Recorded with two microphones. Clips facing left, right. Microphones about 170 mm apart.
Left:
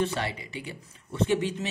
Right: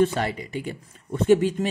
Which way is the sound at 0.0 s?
45° right (ahead or behind).